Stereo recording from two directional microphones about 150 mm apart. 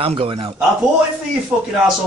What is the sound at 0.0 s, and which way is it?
Speech, 40° right (ahead or behind).